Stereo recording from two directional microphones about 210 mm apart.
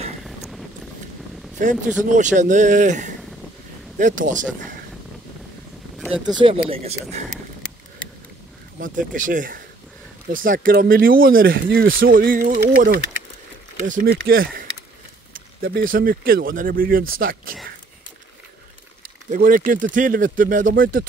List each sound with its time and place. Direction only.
1.6 s speech: 35° right (ahead or behind)
4.3 s speech: 40° right (ahead or behind)
5.9 s a sound: centre (ahead or behind)
6.2 s speech: 20° right (ahead or behind)
8.7 s speech: 40° right (ahead or behind)
15.9 s speech: 45° right (ahead or behind)
19.3 s speech: 40° right (ahead or behind)